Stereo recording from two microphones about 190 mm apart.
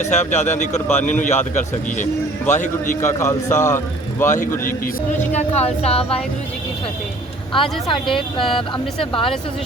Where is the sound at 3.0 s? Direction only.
15° left (ahead or behind).